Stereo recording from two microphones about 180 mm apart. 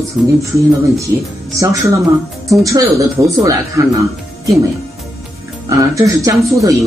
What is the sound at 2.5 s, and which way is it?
Speech, 15° right (ahead or behind).